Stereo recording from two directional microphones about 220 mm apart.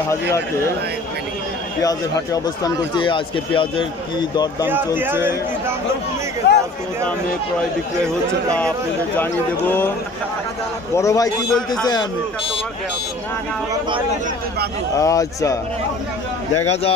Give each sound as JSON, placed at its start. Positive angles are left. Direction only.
{"t": 1.8, "sound": "speech", "side_deg": 15}
{"t": 4.6, "sound": "speech", "side_deg": -10}
{"t": 6.4, "sound": "speech", "side_deg": 50}
{"t": 8.5, "sound": "speech", "side_deg": 5}
{"t": 11.0, "sound": "speech", "side_deg": 15}
{"t": 11.5, "sound": "speech", "side_deg": 5}
{"t": 15.0, "sound": "speech", "side_deg": 15}
{"t": 16.6, "sound": "speech", "side_deg": 30}